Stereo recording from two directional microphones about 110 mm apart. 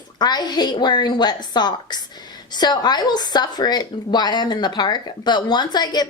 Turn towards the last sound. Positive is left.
turn(degrees=40)  # may be behind; listen again after turning